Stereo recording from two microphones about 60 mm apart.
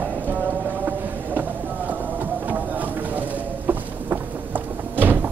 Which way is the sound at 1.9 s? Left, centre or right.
Right.